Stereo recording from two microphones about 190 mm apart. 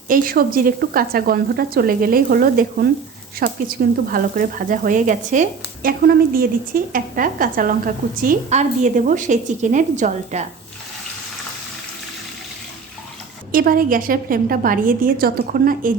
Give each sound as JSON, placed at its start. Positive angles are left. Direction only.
{"t": 0.1, "sound": "speech", "side_deg": -50}
{"t": 13.5, "sound": "speech", "side_deg": -50}